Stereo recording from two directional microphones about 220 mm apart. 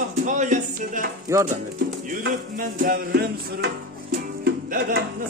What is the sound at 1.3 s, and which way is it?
Speech, 15° right (ahead or behind).